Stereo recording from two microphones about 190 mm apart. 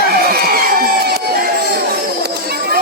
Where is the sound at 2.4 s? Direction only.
55° right (ahead or behind).